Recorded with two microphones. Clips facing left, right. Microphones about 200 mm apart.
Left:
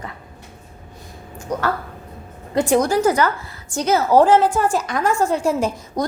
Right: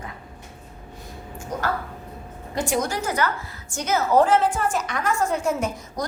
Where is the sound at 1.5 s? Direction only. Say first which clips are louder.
Left 4 dB; 70° left (ahead or behind).